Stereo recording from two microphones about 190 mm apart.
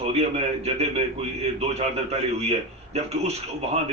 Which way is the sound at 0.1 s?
35° right (ahead or behind).